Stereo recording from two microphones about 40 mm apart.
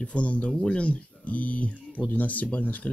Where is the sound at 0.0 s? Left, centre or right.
Left.